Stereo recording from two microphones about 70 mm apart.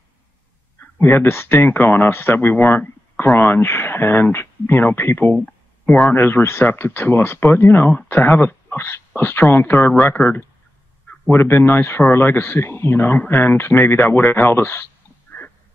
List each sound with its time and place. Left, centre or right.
0.7 s speech: left
5.4 s a sound: centre
6.1 s speech: left
10.0 s speech: centre
11.2 s speech: left